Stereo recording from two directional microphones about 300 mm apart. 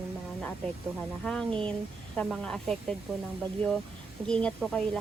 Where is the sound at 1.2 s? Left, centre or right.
Centre.